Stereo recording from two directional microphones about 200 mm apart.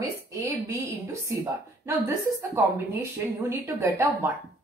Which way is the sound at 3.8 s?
15° right (ahead or behind).